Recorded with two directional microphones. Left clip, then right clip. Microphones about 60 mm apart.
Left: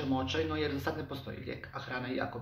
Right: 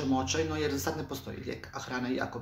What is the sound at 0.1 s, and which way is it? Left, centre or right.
Speech, right.